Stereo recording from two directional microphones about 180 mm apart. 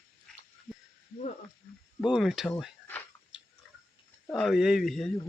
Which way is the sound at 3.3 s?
5° right (ahead or behind).